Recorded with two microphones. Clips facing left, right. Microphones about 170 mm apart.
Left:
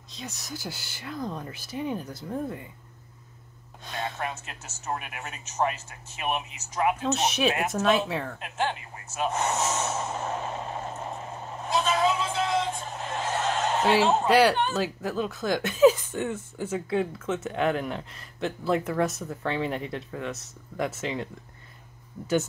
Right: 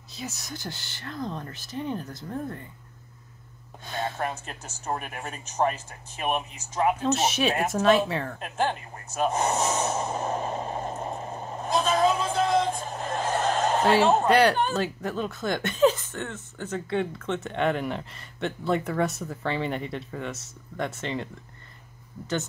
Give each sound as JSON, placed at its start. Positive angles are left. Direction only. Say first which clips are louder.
{"t": 0.1, "sound": "speech", "louder": "right 1 dB", "side_deg": -5}
{"t": 3.8, "sound": "speech", "louder": "right 2 dB", "side_deg": 0}
{"t": 4.2, "sound": "speech", "louder": "right 3 dB", "side_deg": -35}
{"t": 7.0, "sound": "speech", "louder": "right 1 dB", "side_deg": 0}
{"t": 8.4, "sound": "snort", "louder": "right 2 dB", "side_deg": -40}
{"t": 14.2, "sound": "speech", "louder": "even", "side_deg": 0}